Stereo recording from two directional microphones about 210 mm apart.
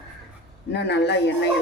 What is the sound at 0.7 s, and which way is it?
Speech, 55° left (ahead or behind).